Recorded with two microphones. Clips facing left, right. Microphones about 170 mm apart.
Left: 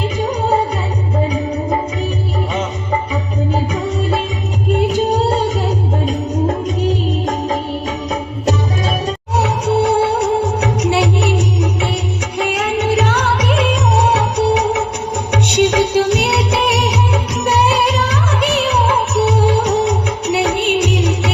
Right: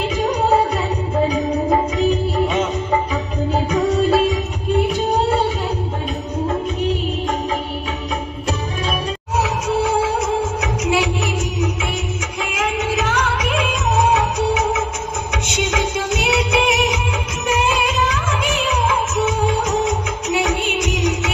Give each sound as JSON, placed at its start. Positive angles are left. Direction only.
{"t": 9.4, "sound": "music", "side_deg": 35}
{"t": 15.4, "sound": "music of bollywood", "side_deg": 35}
{"t": 17.4, "sound": "music", "side_deg": 35}